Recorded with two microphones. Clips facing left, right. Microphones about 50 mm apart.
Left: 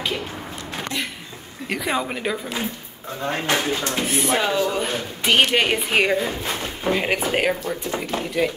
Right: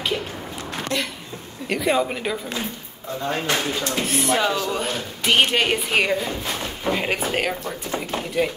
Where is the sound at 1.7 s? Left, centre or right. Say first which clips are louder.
Right 3 dB; centre.